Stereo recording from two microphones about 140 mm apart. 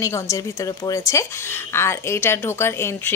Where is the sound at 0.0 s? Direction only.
20° left (ahead or behind).